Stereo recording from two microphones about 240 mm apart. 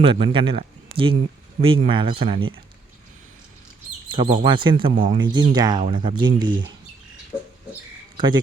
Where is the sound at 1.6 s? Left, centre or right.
Right.